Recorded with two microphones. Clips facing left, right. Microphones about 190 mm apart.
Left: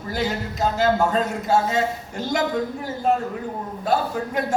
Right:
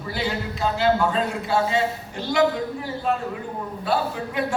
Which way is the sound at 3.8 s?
45° left (ahead or behind).